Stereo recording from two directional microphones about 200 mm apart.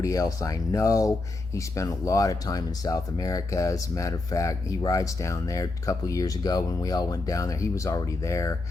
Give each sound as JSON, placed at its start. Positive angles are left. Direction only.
{"t": 0.0, "sound": "speech", "side_deg": 15}